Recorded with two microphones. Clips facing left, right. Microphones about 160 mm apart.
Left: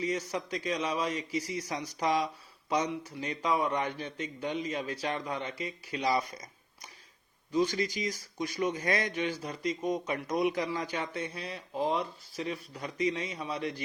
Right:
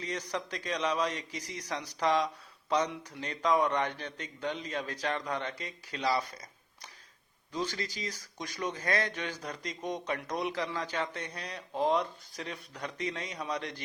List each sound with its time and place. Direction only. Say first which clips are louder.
0.0 s a man's voice: left 3 dB; 10° left (ahead or behind)